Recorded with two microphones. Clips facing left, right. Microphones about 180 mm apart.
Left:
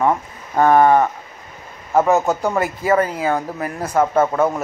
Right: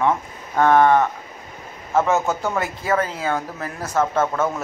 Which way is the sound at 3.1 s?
10° left (ahead or behind).